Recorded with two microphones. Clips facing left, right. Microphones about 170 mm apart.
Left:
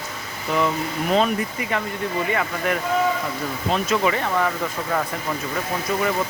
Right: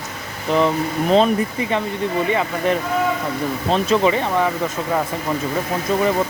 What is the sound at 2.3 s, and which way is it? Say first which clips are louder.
Speech: right 4 dB; 25° right (ahead or behind).